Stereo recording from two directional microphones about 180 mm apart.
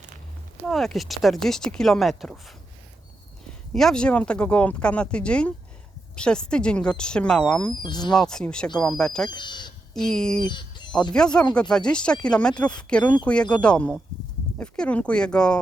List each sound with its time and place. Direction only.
0.7 s speech: centre (ahead or behind)
3.7 s speech: 5° left (ahead or behind)
7.8 s speech: 25° left (ahead or behind)
8.1 s speech: 5° left (ahead or behind)
9.3 s speech: 25° left (ahead or behind)
9.9 s speech: 5° left (ahead or behind)
10.4 s a sound: 25° left (ahead or behind)
11.1 s speech: 5° left (ahead or behind)